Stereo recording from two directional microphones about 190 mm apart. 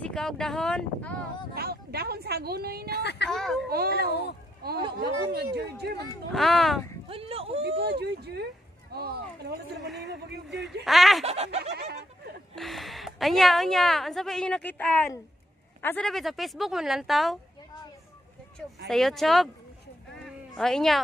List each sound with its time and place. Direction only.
0.0 s speech: 5° left (ahead or behind)
1.5 s speech: 55° right (ahead or behind)
3.0 s a woman's voice: 65° left (ahead or behind)
3.3 s a woman's voice: centre (ahead or behind)
3.6 s speech: 55° right (ahead or behind)
6.3 s a woman's voice: centre (ahead or behind)
7.1 s speech: 30° right (ahead or behind)
7.8 s speech: 60° right (ahead or behind)
10.8 s a woman's voice: centre (ahead or behind)
11.2 s snicker: 35° right (ahead or behind)
12.5 s a woman's voice: centre (ahead or behind)
18.9 s a woman's voice: centre (ahead or behind)
20.5 s a woman's voice: centre (ahead or behind)